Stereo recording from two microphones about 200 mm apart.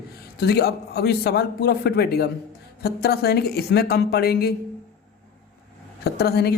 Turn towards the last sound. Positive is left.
turn(degrees=50)  # may be behind; listen again after turning